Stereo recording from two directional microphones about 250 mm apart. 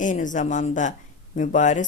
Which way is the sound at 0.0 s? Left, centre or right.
Left.